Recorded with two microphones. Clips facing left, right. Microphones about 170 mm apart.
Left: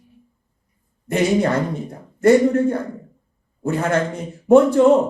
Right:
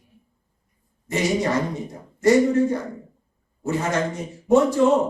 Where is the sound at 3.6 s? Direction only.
55° left (ahead or behind).